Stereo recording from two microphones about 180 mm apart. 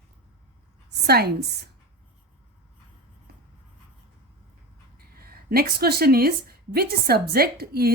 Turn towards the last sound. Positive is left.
turn(degrees=-60)  # may be behind; listen again after turning